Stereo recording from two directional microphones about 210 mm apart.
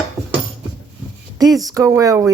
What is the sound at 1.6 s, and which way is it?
Speech, 15° right (ahead or behind).